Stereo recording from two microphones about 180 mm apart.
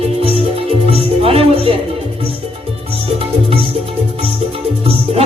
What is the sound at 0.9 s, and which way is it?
Music, 30° right (ahead or behind).